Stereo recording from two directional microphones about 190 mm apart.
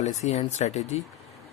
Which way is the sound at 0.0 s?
35° left (ahead or behind).